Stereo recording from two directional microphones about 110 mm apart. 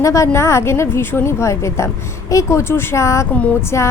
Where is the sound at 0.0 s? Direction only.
30° left (ahead or behind).